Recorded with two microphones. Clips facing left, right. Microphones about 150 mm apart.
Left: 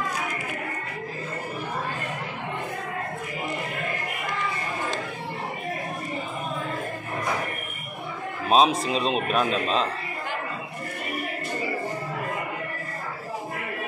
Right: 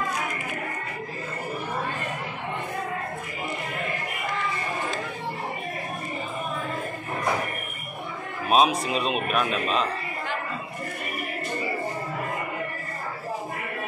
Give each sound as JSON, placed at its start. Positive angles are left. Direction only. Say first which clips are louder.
{"t": 8.5, "sound": "speech", "louder": "left 1 dB", "side_deg": 30}